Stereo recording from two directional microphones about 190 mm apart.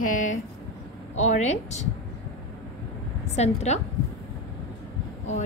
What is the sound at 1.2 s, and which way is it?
Speech, 35° left (ahead or behind).